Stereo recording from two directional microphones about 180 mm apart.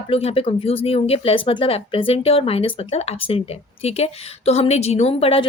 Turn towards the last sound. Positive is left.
turn(degrees=30)  # may be behind; listen again after turning